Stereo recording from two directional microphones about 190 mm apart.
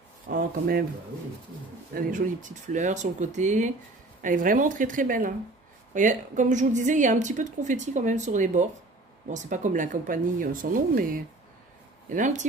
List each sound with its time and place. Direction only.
0.3 s speech: 50° right (ahead or behind)
2.0 s a woman's voice: 45° right (ahead or behind)